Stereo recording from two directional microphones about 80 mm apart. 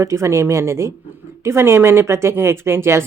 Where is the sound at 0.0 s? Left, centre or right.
Right.